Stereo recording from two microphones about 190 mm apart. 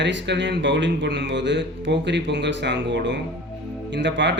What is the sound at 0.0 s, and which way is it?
A man's voice, 70° right (ahead or behind).